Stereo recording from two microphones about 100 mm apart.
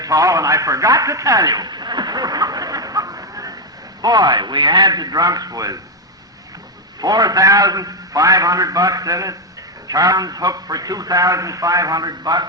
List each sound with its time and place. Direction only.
0.0 s radio: 35° right (ahead or behind)
4.0 s a man's voice: 45° right (ahead or behind)
7.0 s a man's voice: 40° right (ahead or behind)